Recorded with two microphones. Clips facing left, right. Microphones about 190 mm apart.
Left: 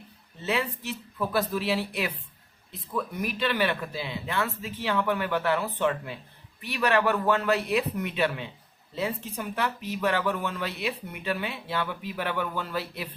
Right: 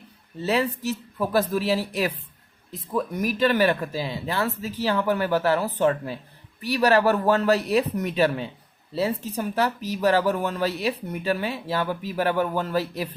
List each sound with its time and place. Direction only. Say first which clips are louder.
0.4 s speech: right 6 dB; 40° right (ahead or behind)